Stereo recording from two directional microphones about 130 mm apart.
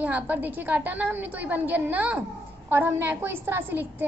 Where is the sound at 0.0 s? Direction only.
15° right (ahead or behind).